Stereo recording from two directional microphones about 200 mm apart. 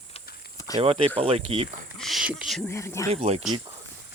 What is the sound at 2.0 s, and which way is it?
Speech, centre (ahead or behind).